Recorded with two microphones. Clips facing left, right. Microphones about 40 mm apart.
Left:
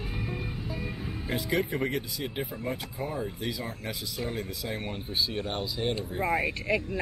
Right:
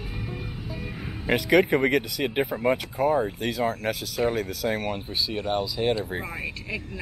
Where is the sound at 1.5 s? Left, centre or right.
Right.